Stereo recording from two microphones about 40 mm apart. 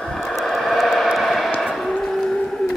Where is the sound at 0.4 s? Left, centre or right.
Centre.